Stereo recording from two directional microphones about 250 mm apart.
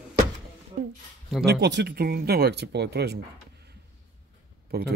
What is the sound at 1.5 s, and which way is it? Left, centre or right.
Speech, right.